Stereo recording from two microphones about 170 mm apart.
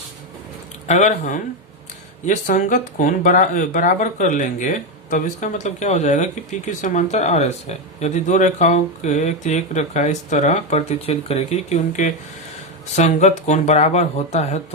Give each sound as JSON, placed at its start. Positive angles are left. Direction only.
{"t": 0.9, "sound": "speech", "side_deg": 45}